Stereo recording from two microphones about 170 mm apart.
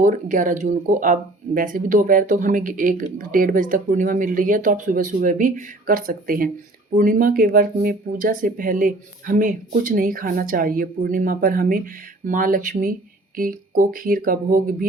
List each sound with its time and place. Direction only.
0.0 s speech: 50° right (ahead or behind)